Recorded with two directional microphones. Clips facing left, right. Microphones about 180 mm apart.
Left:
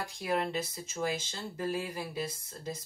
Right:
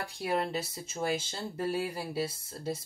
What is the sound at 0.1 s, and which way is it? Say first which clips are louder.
Speech: right 1 dB; 30° right (ahead or behind).